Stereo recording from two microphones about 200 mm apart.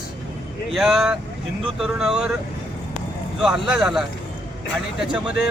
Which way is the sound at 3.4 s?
Centre (ahead or behind).